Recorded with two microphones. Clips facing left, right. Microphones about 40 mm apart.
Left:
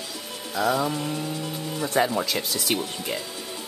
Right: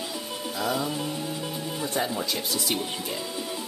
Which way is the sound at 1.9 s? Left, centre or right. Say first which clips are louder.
Left 7 dB; left.